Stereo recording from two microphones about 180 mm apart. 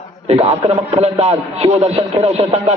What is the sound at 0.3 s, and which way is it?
A man's voice, 35° right (ahead or behind).